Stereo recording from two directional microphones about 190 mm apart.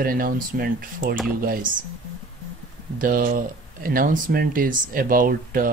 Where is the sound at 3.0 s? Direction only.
45° right (ahead or behind).